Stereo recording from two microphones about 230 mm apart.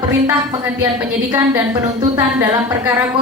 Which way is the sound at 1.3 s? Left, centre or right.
Centre.